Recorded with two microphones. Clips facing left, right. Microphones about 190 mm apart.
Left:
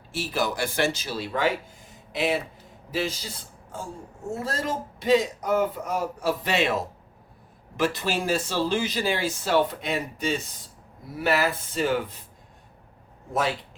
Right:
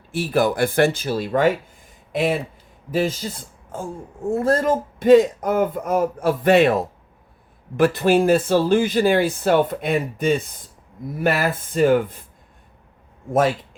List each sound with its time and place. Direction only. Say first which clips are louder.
0.1 s speech: right 8 dB; 55° right (ahead or behind)
4.3 s speech: right 10 dB; 55° right (ahead or behind)